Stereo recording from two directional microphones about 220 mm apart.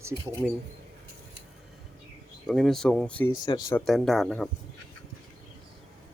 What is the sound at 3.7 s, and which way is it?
Speech, centre (ahead or behind).